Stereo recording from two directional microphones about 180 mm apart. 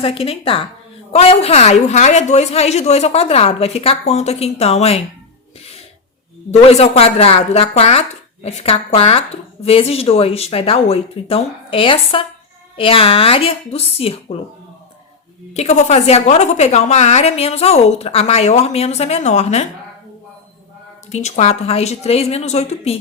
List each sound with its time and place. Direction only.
0.0 s a woman's voice: 30° left (ahead or behind)
6.5 s a woman's voice: 35° left (ahead or behind)
15.5 s a woman's voice: 40° left (ahead or behind)
21.1 s a woman's voice: 40° left (ahead or behind)